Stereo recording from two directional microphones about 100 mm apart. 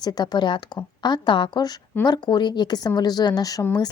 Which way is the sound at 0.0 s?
40° left (ahead or behind).